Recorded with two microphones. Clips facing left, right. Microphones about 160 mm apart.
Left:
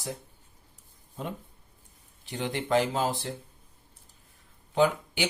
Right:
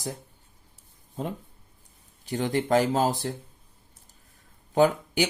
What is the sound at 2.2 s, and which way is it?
Speech, 40° right (ahead or behind).